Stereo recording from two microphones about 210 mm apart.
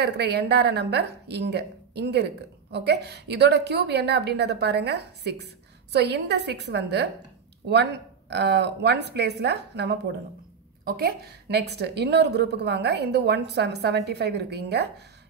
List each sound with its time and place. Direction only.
0.0 s a woman's voice: 50° right (ahead or behind)